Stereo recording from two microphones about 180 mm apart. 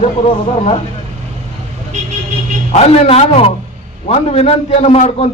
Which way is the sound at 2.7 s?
35° left (ahead or behind).